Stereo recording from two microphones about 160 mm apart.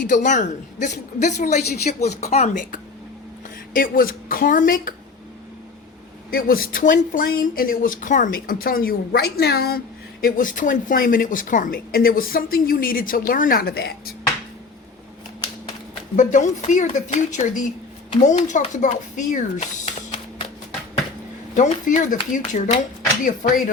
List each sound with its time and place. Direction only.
0.0 s a woman's voice: 55° left (ahead or behind)
6.3 s speech: 65° left (ahead or behind)
16.1 s a woman's voice: 50° left (ahead or behind)
19.5 s a sound: 45° left (ahead or behind)
21.5 s a woman's voice: 50° left (ahead or behind)